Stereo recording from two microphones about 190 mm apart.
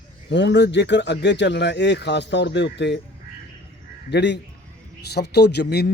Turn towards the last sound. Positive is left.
turn(degrees=60)  # may be behind; listen again after turning